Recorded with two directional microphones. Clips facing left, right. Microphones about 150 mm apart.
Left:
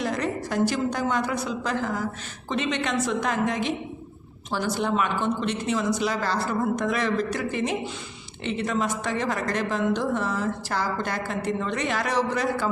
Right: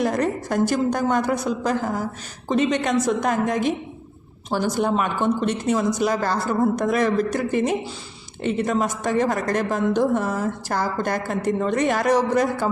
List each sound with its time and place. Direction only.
0.0 s a woman's voice: 50° right (ahead or behind)